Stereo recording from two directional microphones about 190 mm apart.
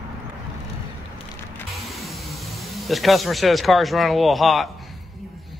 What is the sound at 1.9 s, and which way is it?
Speech, centre (ahead or behind).